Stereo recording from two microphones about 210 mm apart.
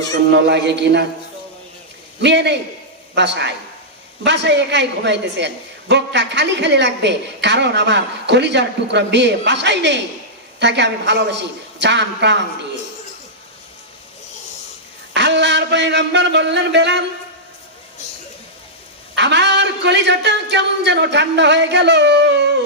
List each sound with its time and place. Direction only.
0.3 s a woman's voice: 55° right (ahead or behind)
2.2 s a woman's voice: 55° right (ahead or behind)
15.1 s a sound: 55° right (ahead or behind)
19.1 s a woman's voice: 55° right (ahead or behind)